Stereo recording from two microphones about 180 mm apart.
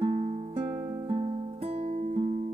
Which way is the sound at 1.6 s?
35° right (ahead or behind).